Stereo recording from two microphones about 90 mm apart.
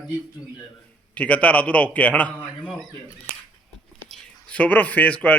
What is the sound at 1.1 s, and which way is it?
Speech, 15° left (ahead or behind).